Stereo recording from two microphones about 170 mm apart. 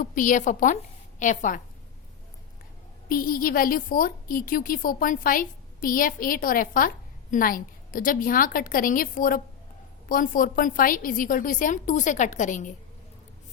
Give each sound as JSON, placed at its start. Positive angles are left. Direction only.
{"t": 0.0, "sound": "a woman's voice", "side_deg": 50}
{"t": 3.1, "sound": "a woman's voice", "side_deg": 55}